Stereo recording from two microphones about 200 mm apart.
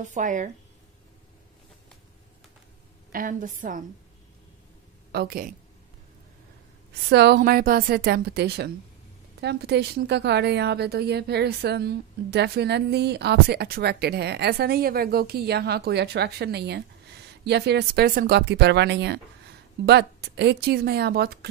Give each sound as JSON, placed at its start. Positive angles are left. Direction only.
{"t": 0.0, "sound": "speech", "side_deg": -40}
{"t": 3.1, "sound": "a woman's voice", "side_deg": -45}
{"t": 5.1, "sound": "a woman's voice", "side_deg": -50}
{"t": 7.1, "sound": "a woman's voice", "side_deg": -55}